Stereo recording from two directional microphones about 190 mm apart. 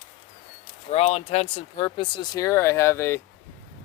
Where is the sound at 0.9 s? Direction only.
35° left (ahead or behind); by 3.2 s 15° left (ahead or behind).